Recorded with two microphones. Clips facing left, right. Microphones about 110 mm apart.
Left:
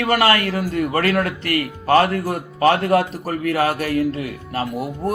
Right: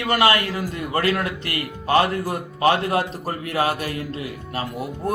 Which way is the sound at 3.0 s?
25° right (ahead or behind).